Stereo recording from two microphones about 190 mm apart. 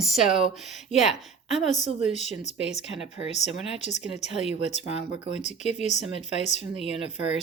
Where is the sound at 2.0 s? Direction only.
35° left (ahead or behind).